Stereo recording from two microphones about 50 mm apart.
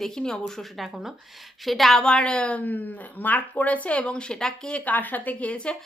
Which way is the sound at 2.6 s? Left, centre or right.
Left.